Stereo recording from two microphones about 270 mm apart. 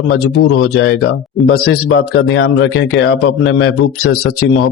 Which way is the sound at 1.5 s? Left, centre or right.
Left.